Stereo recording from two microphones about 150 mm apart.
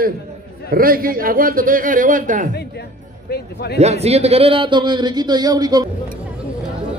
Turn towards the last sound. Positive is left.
turn(degrees=-25)  # may be behind; listen again after turning